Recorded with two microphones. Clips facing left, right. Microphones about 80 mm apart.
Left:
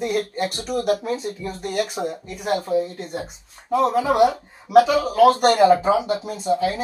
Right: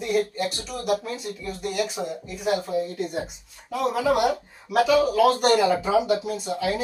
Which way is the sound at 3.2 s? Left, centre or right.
Left.